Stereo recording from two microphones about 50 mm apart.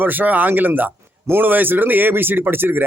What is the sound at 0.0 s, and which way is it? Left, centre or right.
A man's voice, right.